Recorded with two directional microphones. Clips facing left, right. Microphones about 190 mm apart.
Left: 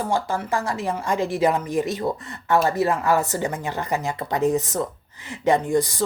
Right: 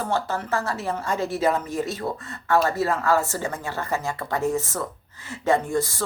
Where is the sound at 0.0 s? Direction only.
15° left (ahead or behind).